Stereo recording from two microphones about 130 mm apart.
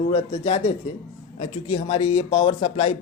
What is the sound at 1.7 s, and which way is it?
Speech, 45° left (ahead or behind).